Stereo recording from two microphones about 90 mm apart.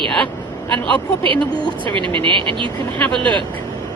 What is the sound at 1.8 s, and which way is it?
Speech, 70° right (ahead or behind).